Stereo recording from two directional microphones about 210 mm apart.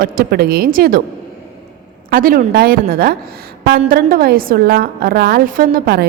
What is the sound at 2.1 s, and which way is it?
A woman's voice, 45° right (ahead or behind).